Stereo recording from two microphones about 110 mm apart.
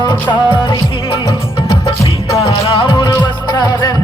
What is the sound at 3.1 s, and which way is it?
Music, 35° left (ahead or behind).